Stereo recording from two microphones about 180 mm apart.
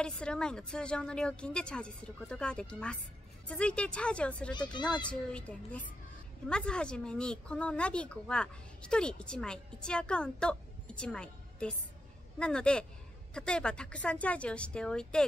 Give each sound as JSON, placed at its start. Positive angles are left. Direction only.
{"t": 0.0, "sound": "a woman's voice", "side_deg": 5}